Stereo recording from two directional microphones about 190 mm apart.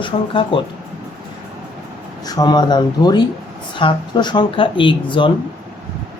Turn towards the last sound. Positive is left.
turn(degrees=25)  # may be behind; listen again after turning